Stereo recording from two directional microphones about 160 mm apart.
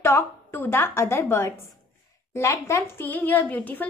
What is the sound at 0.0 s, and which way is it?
A woman's voice, 15° left (ahead or behind).